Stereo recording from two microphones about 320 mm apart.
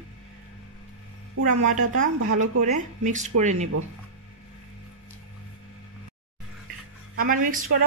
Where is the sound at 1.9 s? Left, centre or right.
Right.